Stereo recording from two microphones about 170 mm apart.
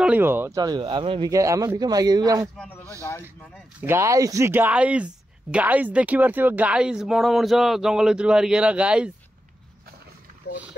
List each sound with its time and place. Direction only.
0.0 s speech: 10° right (ahead or behind)
0.6 s a man's voice: 25° right (ahead or behind)
1.3 s a man's voice: 20° right (ahead or behind)
2.5 s a man's voice: 5° left (ahead or behind)
3.0 s speech: 15° left (ahead or behind)
3.8 s speech: 15° right (ahead or behind)